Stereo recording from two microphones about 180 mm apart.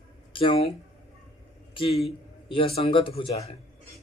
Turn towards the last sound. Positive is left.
turn(degrees=35)  # may be behind; listen again after turning